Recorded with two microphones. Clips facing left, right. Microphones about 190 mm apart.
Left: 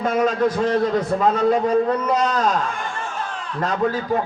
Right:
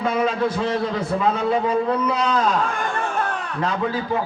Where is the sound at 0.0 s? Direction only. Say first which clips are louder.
Left 2 dB; 45° left (ahead or behind).